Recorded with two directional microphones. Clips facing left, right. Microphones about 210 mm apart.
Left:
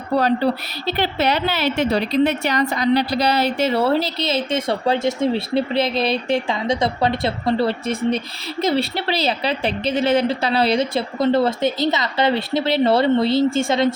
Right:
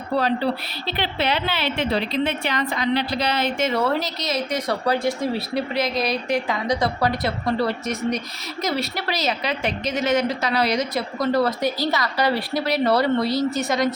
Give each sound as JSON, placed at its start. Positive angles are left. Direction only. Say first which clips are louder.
{"t": 0.9, "sound": "a woman's voice", "louder": "left 4 dB", "side_deg": 45}